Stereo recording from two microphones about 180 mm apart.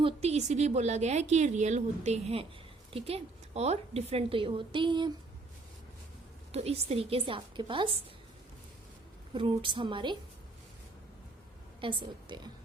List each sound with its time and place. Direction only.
0.0 s a woman's voice: 35° right (ahead or behind)
6.5 s a woman's voice: 35° right (ahead or behind)
9.3 s a woman's voice: 30° right (ahead or behind)
11.8 s a woman's voice: 30° right (ahead or behind)